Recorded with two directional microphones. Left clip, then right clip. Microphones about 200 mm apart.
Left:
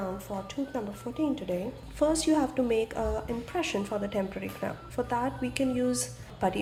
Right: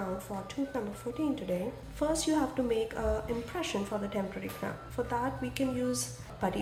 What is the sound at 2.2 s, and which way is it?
A woman's voice, 25° left (ahead or behind).